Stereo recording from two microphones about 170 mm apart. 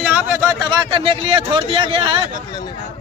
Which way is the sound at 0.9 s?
30° right (ahead or behind).